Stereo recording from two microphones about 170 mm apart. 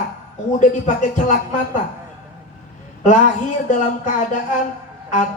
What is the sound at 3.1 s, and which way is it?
Speech, 50° left (ahead or behind).